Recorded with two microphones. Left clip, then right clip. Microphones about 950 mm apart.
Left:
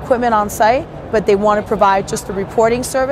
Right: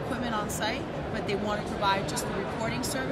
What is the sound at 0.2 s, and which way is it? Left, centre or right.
Speech, left.